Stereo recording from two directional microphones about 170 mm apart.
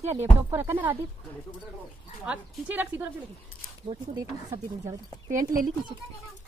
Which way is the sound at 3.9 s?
20° right (ahead or behind).